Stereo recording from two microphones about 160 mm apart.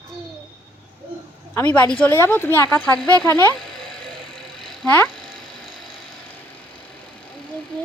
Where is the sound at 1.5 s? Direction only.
10° left (ahead or behind).